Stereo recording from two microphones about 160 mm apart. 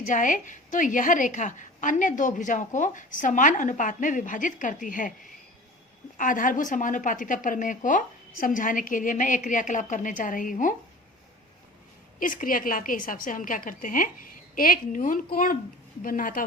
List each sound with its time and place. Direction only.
0.1 s a woman's voice: 55° left (ahead or behind)
6.1 s a woman's voice: 55° left (ahead or behind)
12.2 s a woman's voice: 60° left (ahead or behind)